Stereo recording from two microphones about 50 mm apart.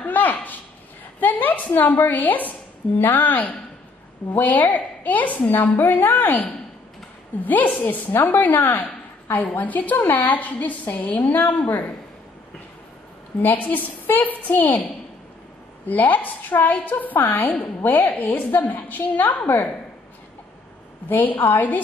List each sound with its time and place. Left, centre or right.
0.0 s a sound: left
1.2 s a woman's voice: left
13.4 s a woman's voice: left
15.9 s a woman's voice: left
21.1 s a woman's voice: left